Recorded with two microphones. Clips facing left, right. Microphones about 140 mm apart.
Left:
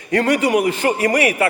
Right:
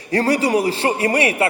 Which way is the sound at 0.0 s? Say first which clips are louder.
Left 1 dB; 35° right (ahead or behind).